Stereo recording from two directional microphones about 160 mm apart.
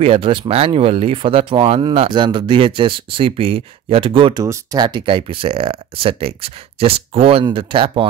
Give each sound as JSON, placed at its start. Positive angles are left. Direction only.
{"t": 0.0, "sound": "speech", "side_deg": -35}